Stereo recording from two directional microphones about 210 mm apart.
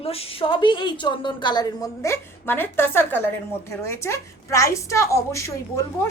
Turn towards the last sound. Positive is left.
turn(degrees=15)  # may be behind; listen again after turning